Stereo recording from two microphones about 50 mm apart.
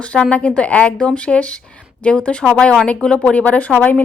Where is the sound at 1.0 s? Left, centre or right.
Centre.